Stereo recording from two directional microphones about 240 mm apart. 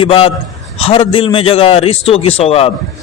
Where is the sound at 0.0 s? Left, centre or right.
Left.